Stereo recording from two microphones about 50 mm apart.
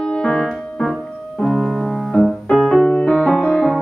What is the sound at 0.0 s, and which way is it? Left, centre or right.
Music, left.